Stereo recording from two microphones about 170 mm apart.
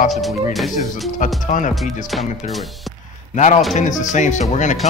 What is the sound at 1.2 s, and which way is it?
Speech, 50° left (ahead or behind).